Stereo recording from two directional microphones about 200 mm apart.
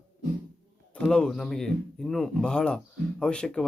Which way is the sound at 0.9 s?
5° left (ahead or behind).